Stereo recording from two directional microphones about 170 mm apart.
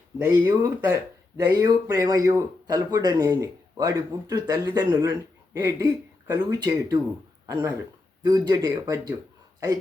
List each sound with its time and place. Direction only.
0.3 s speech: 10° right (ahead or behind)